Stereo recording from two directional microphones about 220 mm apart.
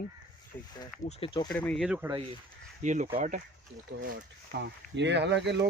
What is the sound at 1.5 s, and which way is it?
Speech, 5° left (ahead or behind).